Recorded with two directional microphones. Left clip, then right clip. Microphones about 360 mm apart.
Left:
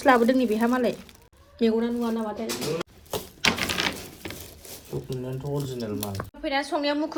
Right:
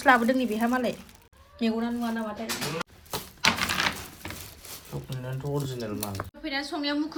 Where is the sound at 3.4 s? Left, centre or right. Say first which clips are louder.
Even; centre.